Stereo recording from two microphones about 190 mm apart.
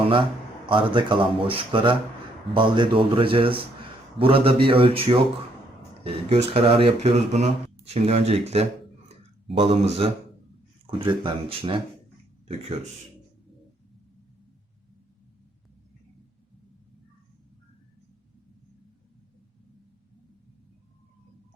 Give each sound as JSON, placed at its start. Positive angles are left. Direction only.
{"t": 0.0, "sound": "a man's voice", "side_deg": -25}